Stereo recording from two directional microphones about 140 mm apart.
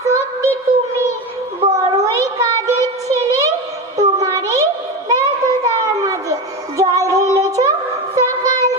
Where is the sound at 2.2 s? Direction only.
20° right (ahead or behind).